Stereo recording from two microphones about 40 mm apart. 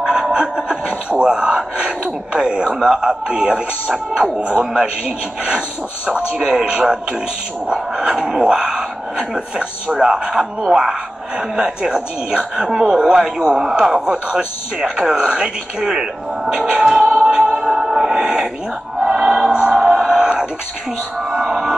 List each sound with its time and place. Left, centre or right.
0.0 s chuckle: right
2.3 s speech: right
17.1 s music: right
19.7 s music: centre